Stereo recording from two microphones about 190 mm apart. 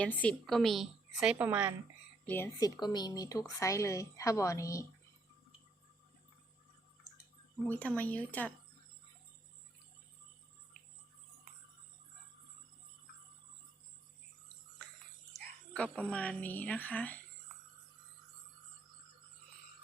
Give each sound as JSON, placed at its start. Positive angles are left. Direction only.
{"t": 0.0, "sound": "a woman's voice", "side_deg": 5}
{"t": 2.2, "sound": "a woman's voice", "side_deg": 10}
{"t": 7.7, "sound": "a woman's voice", "side_deg": 10}
{"t": 15.3, "sound": "a woman's voice", "side_deg": 5}